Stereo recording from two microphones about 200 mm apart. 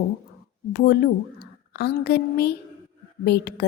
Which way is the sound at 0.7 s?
50° left (ahead or behind).